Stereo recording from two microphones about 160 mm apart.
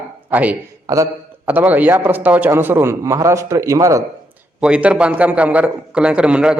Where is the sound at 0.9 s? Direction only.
20° right (ahead or behind).